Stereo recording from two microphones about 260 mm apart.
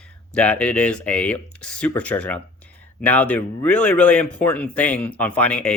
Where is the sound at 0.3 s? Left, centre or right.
Centre.